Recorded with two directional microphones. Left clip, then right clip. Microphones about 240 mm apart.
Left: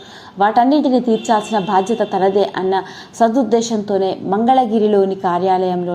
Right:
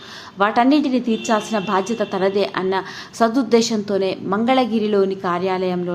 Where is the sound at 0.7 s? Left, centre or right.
Right.